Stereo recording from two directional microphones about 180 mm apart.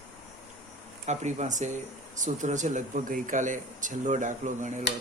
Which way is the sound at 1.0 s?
40° right (ahead or behind).